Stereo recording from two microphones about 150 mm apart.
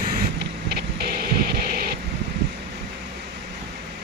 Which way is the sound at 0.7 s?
90° right.